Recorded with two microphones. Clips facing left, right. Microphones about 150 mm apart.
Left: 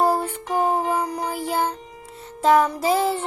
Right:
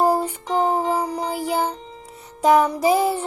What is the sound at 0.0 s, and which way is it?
Music, 10° right (ahead or behind).